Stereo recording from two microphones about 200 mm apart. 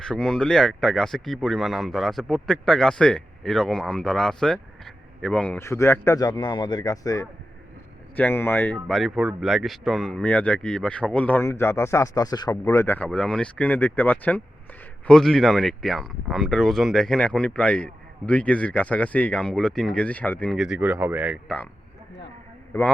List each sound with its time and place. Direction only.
0.0 s speech: 5° left (ahead or behind)